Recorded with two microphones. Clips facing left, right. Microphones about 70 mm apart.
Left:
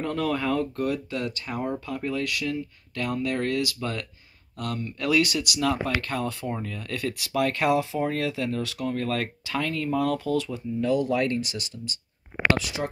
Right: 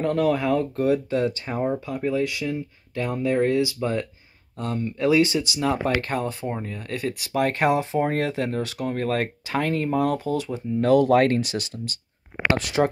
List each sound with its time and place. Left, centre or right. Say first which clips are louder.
0.0 s speech: right 5 dB; centre
0.7 s speech: right 6 dB; right
10.7 s speech: right 7 dB; right